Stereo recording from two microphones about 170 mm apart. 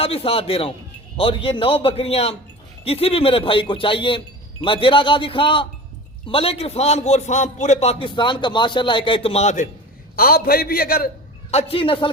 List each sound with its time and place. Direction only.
0.0 s a man's voice: 35° left (ahead or behind)
10.2 s a man's voice: 60° left (ahead or behind)
11.5 s a man's voice: 35° left (ahead or behind)